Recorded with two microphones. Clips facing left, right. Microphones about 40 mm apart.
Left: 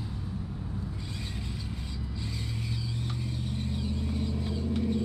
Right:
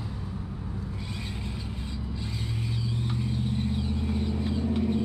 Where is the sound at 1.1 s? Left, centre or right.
Centre.